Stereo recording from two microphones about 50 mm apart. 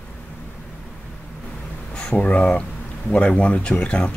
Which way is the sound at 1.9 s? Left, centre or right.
Centre.